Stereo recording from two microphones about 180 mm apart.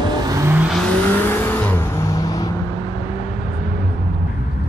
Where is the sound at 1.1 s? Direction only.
10° left (ahead or behind).